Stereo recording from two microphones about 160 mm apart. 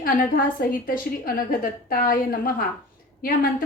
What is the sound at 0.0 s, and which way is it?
A woman's voice, 65° left (ahead or behind).